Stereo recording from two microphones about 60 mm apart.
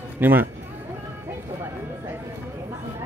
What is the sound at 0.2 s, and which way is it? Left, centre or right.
Speech, right.